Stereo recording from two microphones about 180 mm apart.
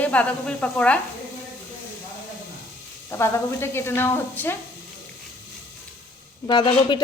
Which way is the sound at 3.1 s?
15° left (ahead or behind).